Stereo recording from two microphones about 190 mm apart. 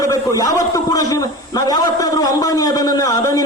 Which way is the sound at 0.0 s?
20° left (ahead or behind).